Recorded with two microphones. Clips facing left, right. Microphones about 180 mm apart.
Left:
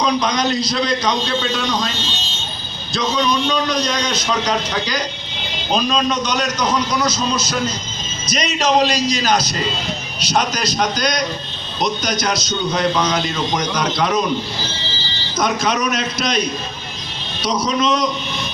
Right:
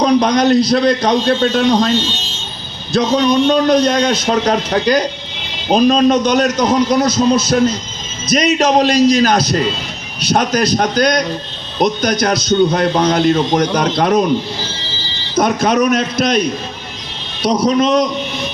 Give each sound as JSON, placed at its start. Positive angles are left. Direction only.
{"t": 0.0, "sound": "a man's voice", "side_deg": -60}
{"t": 2.9, "sound": "a man's voice", "side_deg": -60}
{"t": 15.4, "sound": "a man's voice", "side_deg": -55}
{"t": 17.4, "sound": "a man's voice", "side_deg": -55}